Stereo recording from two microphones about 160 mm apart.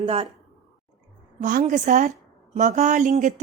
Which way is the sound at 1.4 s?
50° right (ahead or behind).